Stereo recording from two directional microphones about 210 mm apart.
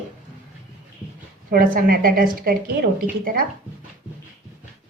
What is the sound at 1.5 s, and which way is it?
A woman's voice, 45° right (ahead or behind).